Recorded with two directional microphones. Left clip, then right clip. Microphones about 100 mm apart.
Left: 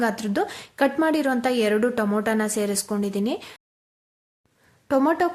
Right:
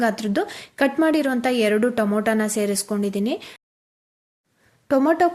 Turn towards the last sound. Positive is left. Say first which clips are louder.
# right 3 dB
turn(degrees=-20)  # may be behind; listen again after turning